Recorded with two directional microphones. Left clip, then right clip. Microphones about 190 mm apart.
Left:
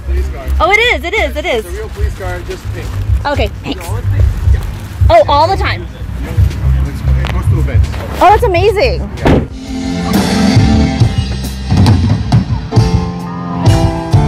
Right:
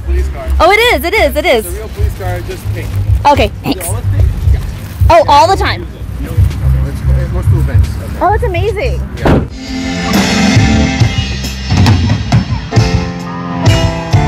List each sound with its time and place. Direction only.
0.6 s speech: 35° right (ahead or behind)
3.2 s speech: 35° right (ahead or behind)
5.0 s speech: 30° right (ahead or behind)
8.5 s a woman's voice: 35° left (ahead or behind)
9.8 s music: 15° right (ahead or behind)